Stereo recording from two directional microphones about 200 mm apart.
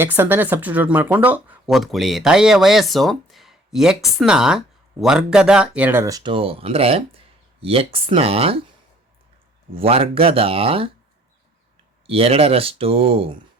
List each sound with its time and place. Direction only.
0.0 s speech: 10° right (ahead or behind); by 8.6 s 30° right (ahead or behind)
9.7 s speech: 30° right (ahead or behind)
12.0 s speech: 30° right (ahead or behind)